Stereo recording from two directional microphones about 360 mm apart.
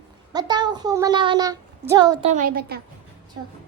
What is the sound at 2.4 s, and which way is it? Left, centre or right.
Speech, right.